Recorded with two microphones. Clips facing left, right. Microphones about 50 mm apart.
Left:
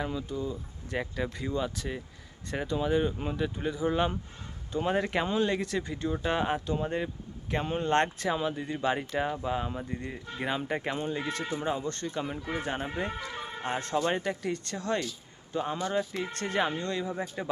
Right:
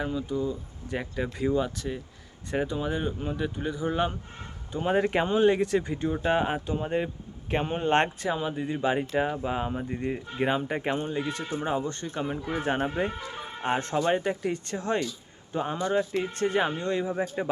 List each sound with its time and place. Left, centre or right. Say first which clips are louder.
0.0 s speech: right 4 dB; centre
1.7 s speech: right 2 dB; centre
8.2 s speech: right 1 dB; centre
10.6 s speech: right 3 dB; centre
11.6 s speech: right 5 dB; centre
12.6 s speech: right 9 dB; right
13.1 s speech: right 1 dB; centre
13.6 s speech: right 4 dB; right
14.0 s speech: right 4 dB; centre
16.2 s speech: right 4 dB; centre